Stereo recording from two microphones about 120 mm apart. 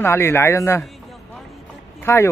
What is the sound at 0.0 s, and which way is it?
Speech, 20° left (ahead or behind).